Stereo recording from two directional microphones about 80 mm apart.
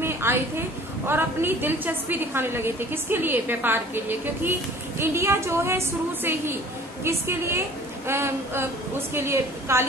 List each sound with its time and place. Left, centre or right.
0.0 s a woman's voice: right